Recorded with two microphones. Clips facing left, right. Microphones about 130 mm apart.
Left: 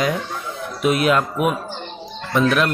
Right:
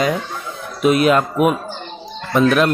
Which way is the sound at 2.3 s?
40° right (ahead or behind).